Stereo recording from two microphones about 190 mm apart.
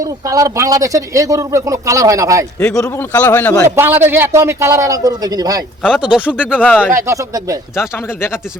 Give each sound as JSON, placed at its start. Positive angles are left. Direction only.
{"t": 0.0, "sound": "speech", "side_deg": -15}
{"t": 2.6, "sound": "a man's voice", "side_deg": 5}
{"t": 3.8, "sound": "speech", "side_deg": -10}
{"t": 5.8, "sound": "speech", "side_deg": -5}
{"t": 6.6, "sound": "a man's voice", "side_deg": 10}
{"t": 6.8, "sound": "speech", "side_deg": -15}
{"t": 7.8, "sound": "a man's voice", "side_deg": 15}